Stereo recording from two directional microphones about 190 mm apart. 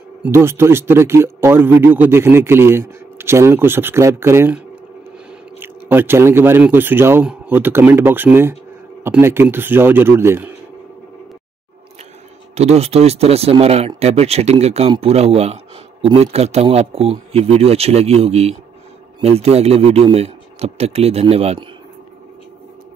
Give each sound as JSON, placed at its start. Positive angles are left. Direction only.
{"t": 0.2, "sound": "a man's voice", "side_deg": -15}
{"t": 5.6, "sound": "a man's voice", "side_deg": -10}
{"t": 12.5, "sound": "speech", "side_deg": -35}